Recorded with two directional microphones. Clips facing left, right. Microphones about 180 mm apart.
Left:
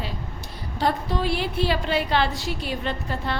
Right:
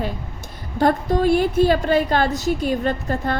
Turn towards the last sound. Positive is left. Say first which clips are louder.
# right 6 dB
turn(degrees=-45)  # may be behind; listen again after turning